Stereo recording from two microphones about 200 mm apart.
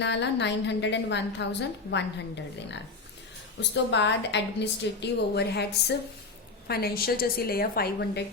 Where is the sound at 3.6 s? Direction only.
60° left (ahead or behind).